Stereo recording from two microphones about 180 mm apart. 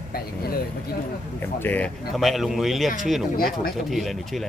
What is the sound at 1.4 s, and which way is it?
Speech, 10° left (ahead or behind).